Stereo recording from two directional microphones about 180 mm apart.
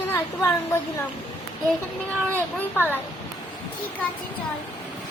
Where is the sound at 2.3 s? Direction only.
10° left (ahead or behind).